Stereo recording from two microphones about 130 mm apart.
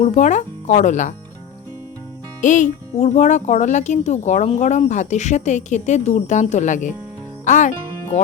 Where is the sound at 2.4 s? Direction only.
70° left (ahead or behind).